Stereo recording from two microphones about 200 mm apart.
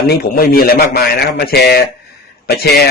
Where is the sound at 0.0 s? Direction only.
50° left (ahead or behind).